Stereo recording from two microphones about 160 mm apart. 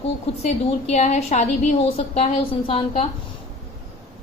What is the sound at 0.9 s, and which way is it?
A woman's voice, 45° left (ahead or behind).